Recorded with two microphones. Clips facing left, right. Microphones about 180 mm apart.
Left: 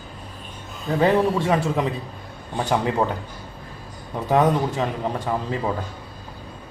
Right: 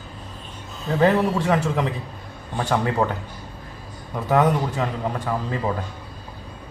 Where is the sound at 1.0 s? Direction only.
15° left (ahead or behind).